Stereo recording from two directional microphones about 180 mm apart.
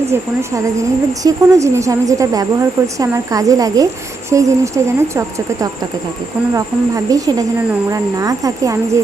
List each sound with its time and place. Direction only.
0.1 s a woman's voice: 15° right (ahead or behind)